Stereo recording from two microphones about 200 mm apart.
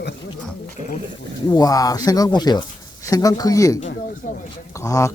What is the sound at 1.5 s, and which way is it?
Speech, 20° left (ahead or behind).